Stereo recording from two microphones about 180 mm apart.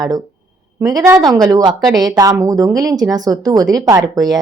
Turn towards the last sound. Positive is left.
turn(degrees=-20)  # may be behind; listen again after turning